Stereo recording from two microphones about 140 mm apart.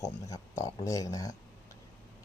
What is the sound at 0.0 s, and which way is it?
A man's voice, 25° left (ahead or behind).